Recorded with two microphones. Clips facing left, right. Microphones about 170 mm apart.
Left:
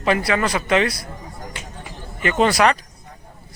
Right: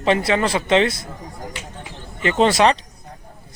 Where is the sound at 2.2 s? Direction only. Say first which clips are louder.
Right 1 dB; 25° right (ahead or behind).